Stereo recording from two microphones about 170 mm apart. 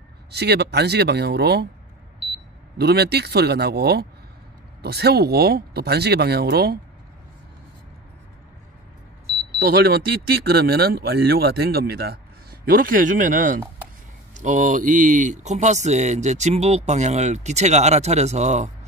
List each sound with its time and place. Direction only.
0.3 s speech: 75° right (ahead or behind)
2.8 s speech: 70° right (ahead or behind)
9.6 s speech: 60° right (ahead or behind); by 18.7 s 40° right (ahead or behind)